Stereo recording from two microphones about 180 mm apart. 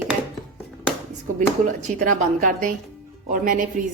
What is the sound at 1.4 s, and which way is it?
A woman's voice, 45° right (ahead or behind).